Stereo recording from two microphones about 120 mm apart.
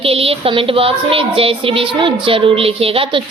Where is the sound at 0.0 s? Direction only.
50° right (ahead or behind).